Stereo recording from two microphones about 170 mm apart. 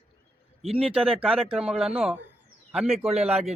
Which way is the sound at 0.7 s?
35° right (ahead or behind).